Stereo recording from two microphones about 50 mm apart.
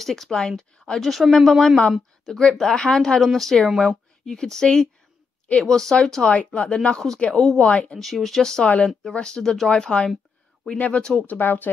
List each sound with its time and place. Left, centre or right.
0.0 s speech: centre
1.0 s speech: centre
6.3 s speech: left
7.3 s speech: centre
8.6 s speech: left
9.1 s speech: centre
9.7 s speech: centre
11.1 s speech: left